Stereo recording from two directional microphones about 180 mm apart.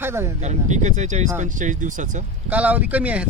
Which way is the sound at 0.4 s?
40° right (ahead or behind).